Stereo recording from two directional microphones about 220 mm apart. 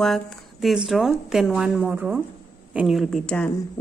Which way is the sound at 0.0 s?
Centre (ahead or behind).